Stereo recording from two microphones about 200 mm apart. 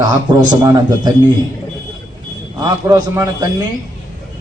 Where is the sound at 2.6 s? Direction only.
20° right (ahead or behind).